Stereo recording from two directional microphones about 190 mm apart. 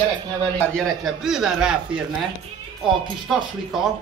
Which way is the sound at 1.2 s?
5° right (ahead or behind).